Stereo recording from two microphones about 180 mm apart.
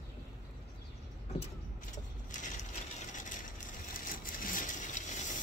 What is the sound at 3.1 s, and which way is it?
Vehicle, 45° left (ahead or behind).